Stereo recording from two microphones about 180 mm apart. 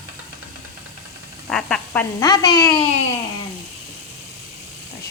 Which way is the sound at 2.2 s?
25° left (ahead or behind).